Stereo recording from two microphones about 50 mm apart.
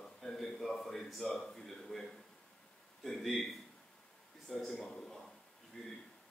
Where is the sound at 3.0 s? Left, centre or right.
Centre.